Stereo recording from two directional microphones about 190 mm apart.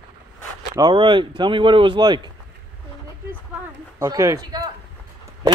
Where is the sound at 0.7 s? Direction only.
25° right (ahead or behind).